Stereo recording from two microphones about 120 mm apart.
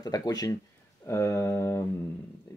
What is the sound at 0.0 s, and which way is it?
Speech, 30° left (ahead or behind).